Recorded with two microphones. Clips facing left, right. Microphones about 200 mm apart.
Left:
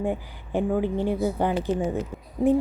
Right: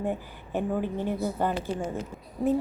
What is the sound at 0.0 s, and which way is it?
A woman's voice, 15° left (ahead or behind).